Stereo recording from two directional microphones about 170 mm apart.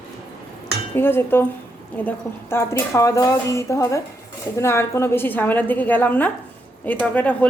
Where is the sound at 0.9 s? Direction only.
15° left (ahead or behind).